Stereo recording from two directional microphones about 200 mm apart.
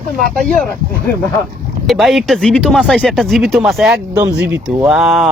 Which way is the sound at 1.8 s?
Centre (ahead or behind).